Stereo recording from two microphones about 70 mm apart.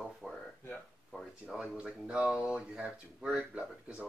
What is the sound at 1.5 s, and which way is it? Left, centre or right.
Speech, centre.